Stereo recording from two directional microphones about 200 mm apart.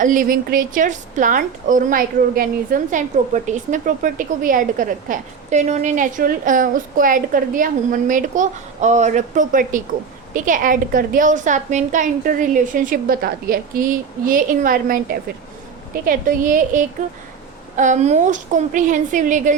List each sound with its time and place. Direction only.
0.0 s a woman's voice: 40° right (ahead or behind)